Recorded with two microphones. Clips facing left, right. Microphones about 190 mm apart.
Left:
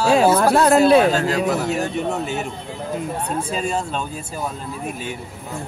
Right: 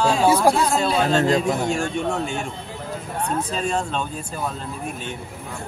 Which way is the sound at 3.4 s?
5° left (ahead or behind).